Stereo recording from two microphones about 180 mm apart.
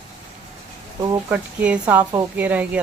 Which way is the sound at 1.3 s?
10° right (ahead or behind).